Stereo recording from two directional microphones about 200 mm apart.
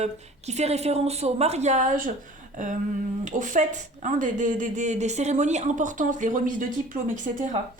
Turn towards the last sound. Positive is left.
turn(degrees=-40)  # may be behind; listen again after turning